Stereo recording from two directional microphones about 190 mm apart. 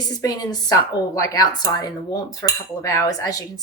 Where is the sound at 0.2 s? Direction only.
20° left (ahead or behind).